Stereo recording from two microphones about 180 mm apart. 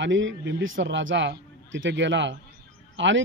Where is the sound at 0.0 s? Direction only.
90° right.